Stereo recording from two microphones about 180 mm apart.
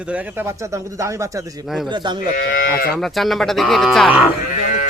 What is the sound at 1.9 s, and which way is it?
Speech, 25° right (ahead or behind).